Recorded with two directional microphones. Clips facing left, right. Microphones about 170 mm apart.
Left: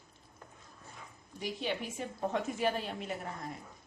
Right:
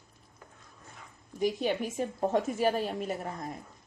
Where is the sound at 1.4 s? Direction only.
45° right (ahead or behind).